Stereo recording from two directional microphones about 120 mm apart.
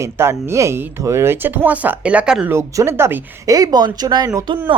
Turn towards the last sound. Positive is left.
turn(degrees=-40)  # may be behind; listen again after turning